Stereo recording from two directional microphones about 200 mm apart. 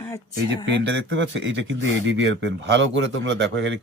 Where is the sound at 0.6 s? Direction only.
65° right (ahead or behind).